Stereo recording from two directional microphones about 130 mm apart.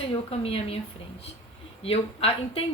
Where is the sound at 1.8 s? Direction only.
50° left (ahead or behind).